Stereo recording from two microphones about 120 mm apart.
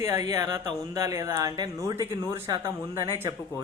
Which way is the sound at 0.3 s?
25° right (ahead or behind).